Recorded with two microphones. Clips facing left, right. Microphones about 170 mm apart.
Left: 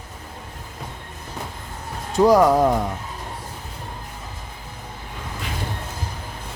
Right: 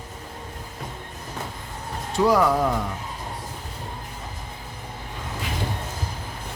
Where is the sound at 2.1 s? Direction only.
40° left (ahead or behind).